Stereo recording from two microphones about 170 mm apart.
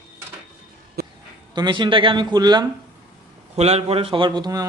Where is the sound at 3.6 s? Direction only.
40° right (ahead or behind).